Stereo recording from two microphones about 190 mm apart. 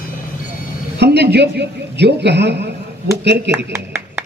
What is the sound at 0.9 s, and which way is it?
A man's voice, 60° right (ahead or behind).